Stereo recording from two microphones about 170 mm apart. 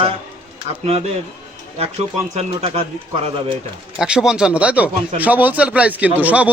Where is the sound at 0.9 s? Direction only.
35° right (ahead or behind).